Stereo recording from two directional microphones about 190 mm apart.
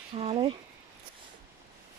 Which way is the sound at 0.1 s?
30° right (ahead or behind).